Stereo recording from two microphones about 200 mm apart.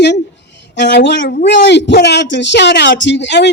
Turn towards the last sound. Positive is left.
turn(degrees=60)  # may be behind; listen again after turning